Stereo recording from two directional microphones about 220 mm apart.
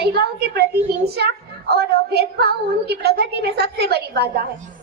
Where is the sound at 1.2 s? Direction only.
45° right (ahead or behind).